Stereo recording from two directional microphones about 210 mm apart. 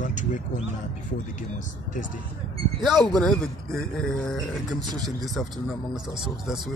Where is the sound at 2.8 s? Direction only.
Centre (ahead or behind).